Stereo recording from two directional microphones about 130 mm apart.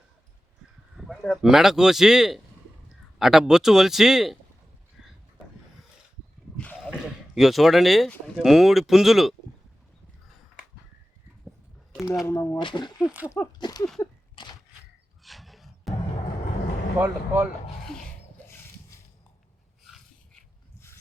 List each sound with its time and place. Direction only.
0.9 s speech: centre (ahead or behind)
6.9 s speech: centre (ahead or behind)
12.2 s speech: 25° left (ahead or behind)
12.5 s speech: 35° left (ahead or behind)
13.0 s speech: 10° right (ahead or behind)
13.6 s a sound: 30° left (ahead or behind)
15.2 s music: centre (ahead or behind)
17.0 s speech: 15° right (ahead or behind)